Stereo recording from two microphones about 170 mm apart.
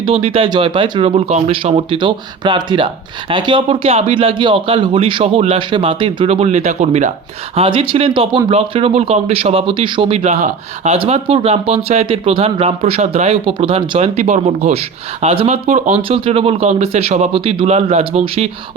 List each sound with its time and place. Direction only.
0.0 s speech: 35° right (ahead or behind)